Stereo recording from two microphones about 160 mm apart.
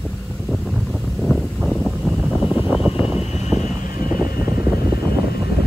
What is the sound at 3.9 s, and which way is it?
Vehicle, 65° left (ahead or behind).